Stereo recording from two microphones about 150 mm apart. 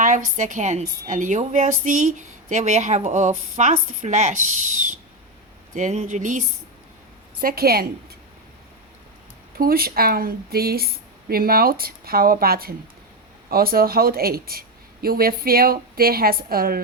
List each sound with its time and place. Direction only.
0.0 s a woman's voice: 55° right (ahead or behind)
5.7 s speech: 50° right (ahead or behind)
7.4 s a woman's voice: 90° right
9.6 s a woman's voice: 80° right
13.5 s a woman's voice: 80° right
15.0 s a woman's voice: 80° right